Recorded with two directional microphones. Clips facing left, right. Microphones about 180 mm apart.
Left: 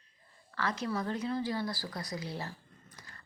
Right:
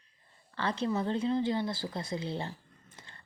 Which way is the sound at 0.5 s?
30° right (ahead or behind).